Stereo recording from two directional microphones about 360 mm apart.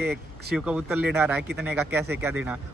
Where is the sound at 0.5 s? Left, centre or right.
Centre.